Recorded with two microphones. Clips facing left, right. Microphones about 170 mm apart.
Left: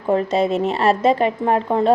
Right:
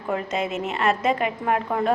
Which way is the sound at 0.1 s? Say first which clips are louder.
Left 8 dB; 35° left (ahead or behind).